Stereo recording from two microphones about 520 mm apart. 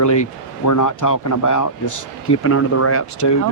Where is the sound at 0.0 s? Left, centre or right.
Left.